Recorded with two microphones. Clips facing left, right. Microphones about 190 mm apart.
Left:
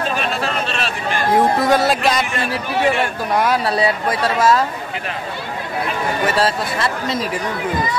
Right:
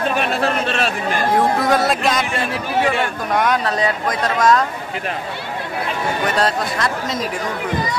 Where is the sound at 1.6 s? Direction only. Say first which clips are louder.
Left 1 dB; centre (ahead or behind).